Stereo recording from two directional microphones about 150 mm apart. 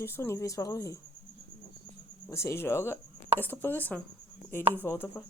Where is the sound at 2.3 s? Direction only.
20° left (ahead or behind).